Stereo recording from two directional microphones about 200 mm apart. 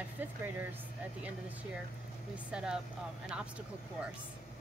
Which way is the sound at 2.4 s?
5° right (ahead or behind).